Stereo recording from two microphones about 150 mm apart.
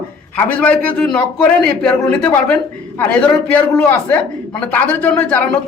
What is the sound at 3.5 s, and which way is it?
Speech, 10° left (ahead or behind).